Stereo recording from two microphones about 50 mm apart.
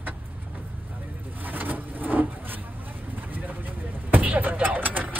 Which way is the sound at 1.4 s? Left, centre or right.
Right.